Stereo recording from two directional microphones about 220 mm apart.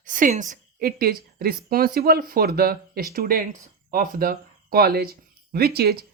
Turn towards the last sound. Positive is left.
turn(degrees=-45)  # may be behind; listen again after turning